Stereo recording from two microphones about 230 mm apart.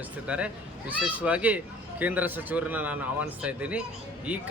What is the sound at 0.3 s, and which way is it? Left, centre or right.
Speech, centre.